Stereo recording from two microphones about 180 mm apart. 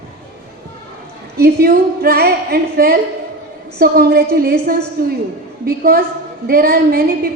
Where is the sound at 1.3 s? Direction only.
55° right (ahead or behind).